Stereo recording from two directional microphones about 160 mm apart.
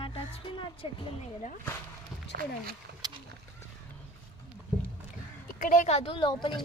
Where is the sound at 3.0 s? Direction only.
25° right (ahead or behind).